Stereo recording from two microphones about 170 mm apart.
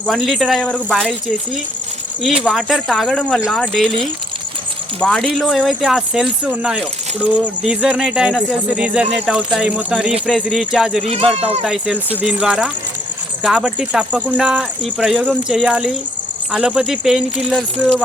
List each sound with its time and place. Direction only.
0.1 s speech: centre (ahead or behind)
2.4 s speech: centre (ahead or behind)
4.9 s speech: 5° left (ahead or behind)
11.0 s speech: 35° right (ahead or behind)
11.6 s speech: centre (ahead or behind)